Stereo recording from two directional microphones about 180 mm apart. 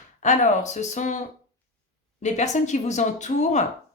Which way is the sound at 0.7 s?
40° left (ahead or behind).